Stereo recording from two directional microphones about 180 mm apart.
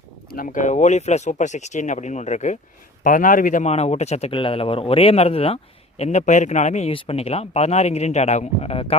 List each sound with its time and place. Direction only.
0.3 s speech: 50° left (ahead or behind); by 9.0 s 35° left (ahead or behind)